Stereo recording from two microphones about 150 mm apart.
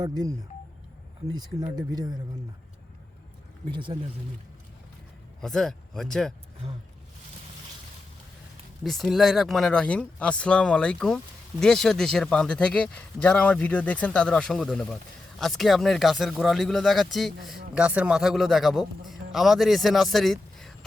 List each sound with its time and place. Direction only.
0.0 s speech: 25° right (ahead or behind)
3.7 s speech: 35° right (ahead or behind)
5.4 s a man's voice: 5° left (ahead or behind)
8.8 s a man's voice: centre (ahead or behind)